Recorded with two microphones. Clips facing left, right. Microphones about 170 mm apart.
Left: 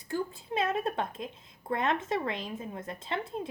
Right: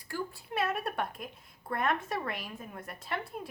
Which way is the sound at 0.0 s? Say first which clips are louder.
Left 4 dB; 20° left (ahead or behind).